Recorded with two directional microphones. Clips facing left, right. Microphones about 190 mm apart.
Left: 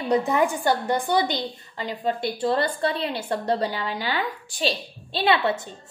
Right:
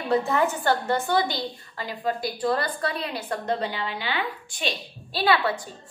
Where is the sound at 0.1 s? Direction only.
15° left (ahead or behind).